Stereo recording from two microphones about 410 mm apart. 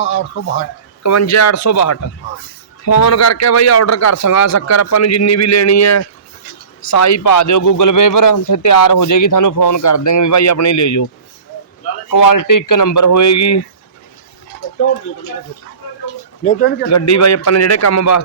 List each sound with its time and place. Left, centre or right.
0.0 s speech: left
1.0 s a man's voice: left
12.1 s a man's voice: left
16.4 s speech: centre
16.9 s speech: left